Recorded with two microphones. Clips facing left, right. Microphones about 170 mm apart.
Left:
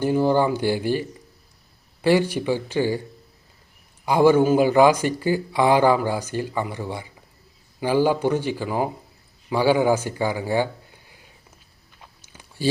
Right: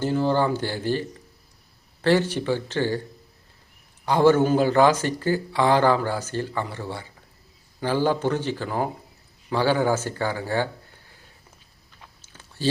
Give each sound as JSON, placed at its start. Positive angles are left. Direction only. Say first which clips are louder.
{"t": 0.0, "sound": "speech", "louder": "left 3 dB", "side_deg": 15}
{"t": 4.0, "sound": "speech", "louder": "left 2 dB", "side_deg": 10}
{"t": 12.2, "sound": "a sound", "louder": "left 3 dB", "side_deg": 15}